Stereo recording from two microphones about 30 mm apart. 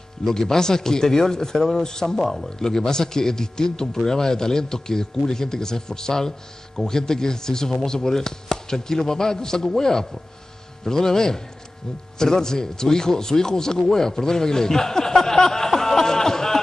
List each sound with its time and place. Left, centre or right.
0.2 s speech: centre
2.2 s speech: centre
2.6 s a man's voice: centre